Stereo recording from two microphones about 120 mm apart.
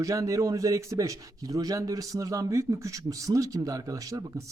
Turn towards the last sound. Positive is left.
turn(degrees=-25)  # may be behind; listen again after turning